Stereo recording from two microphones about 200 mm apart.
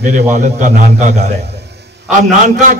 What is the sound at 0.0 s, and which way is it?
A man's voice, 40° right (ahead or behind).